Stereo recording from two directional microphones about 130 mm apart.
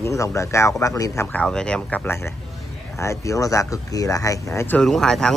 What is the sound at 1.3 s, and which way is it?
Speech, 5° left (ahead or behind).